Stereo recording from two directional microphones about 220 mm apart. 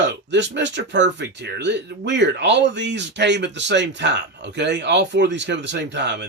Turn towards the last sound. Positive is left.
turn(degrees=-50)  # may be behind; listen again after turning